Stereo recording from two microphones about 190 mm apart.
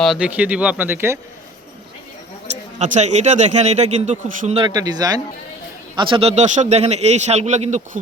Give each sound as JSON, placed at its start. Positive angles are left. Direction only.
{"t": 0.0, "sound": "speech", "side_deg": -5}
{"t": 2.5, "sound": "speech", "side_deg": -35}
{"t": 4.6, "sound": "speech", "side_deg": -20}